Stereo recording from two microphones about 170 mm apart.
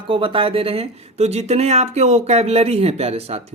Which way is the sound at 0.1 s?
30° right (ahead or behind).